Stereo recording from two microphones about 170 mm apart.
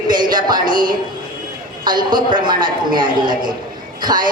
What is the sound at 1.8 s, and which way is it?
A woman's voice, 25° right (ahead or behind).